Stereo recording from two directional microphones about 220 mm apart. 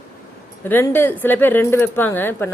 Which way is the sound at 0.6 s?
10° left (ahead or behind).